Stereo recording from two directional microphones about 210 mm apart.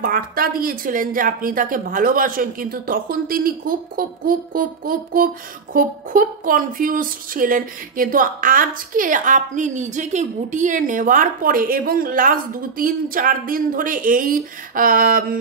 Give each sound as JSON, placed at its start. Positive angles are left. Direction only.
{"t": 0.0, "sound": "speech", "side_deg": -45}